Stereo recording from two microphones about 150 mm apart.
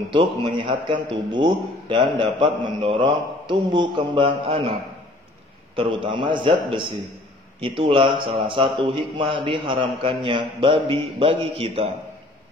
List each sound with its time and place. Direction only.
0.1 s a man's voice: 35° right (ahead or behind)
5.8 s a man's voice: 35° right (ahead or behind)